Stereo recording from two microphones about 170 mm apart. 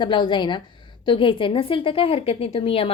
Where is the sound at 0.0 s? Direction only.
25° left (ahead or behind).